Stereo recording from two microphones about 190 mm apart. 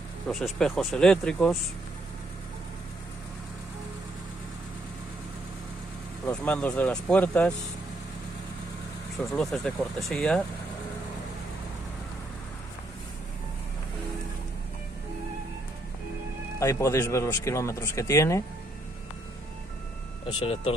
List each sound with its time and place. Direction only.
0.3 s speech: centre (ahead or behind)
6.2 s speech: 10° left (ahead or behind)
9.2 s speech: centre (ahead or behind)
16.5 s speech: 15° left (ahead or behind)
20.3 s speech: 30° left (ahead or behind)